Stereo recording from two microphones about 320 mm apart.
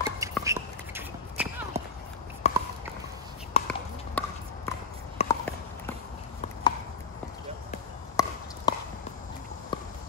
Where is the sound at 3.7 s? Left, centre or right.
Centre.